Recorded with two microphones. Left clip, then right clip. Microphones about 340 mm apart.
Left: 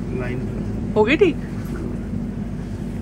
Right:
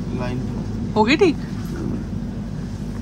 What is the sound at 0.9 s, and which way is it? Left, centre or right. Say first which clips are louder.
Speech: even; centre.